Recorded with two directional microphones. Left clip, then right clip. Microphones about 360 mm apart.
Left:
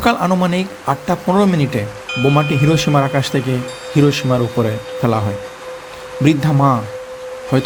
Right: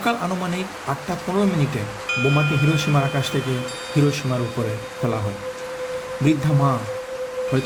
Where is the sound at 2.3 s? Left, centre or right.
Left.